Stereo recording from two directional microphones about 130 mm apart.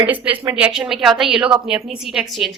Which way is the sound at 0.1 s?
10° right (ahead or behind).